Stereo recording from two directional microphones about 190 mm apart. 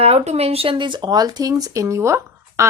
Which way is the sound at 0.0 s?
35° right (ahead or behind).